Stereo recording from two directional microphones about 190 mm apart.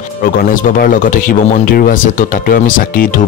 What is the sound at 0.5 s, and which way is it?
A man's voice, 45° left (ahead or behind).